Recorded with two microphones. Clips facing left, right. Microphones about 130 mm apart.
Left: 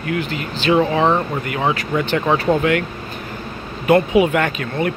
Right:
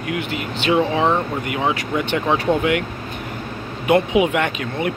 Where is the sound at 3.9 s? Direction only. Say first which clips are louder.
Left 2 dB; 15° right (ahead or behind).